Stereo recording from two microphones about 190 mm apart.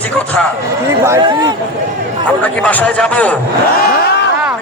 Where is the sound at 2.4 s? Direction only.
10° left (ahead or behind).